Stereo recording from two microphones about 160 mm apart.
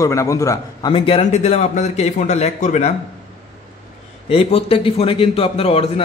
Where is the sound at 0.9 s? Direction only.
35° left (ahead or behind).